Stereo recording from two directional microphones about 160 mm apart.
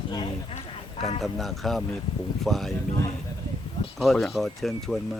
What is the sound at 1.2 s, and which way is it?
Speech, centre (ahead or behind).